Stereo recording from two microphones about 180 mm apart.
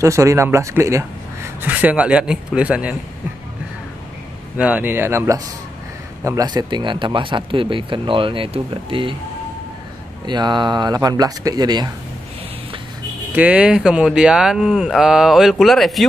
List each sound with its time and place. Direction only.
0.0 s a man's voice: 15° right (ahead or behind)
4.6 s a man's voice: 5° right (ahead or behind); by 9.1 s 30° right (ahead or behind)
10.2 s speech: 25° right (ahead or behind)
13.3 s speech: 5° right (ahead or behind)